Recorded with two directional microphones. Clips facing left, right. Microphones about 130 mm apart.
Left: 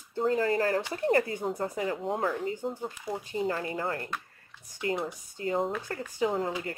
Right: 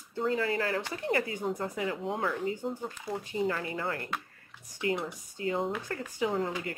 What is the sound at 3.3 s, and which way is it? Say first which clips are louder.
Speech: left 1 dB; 35° left (ahead or behind).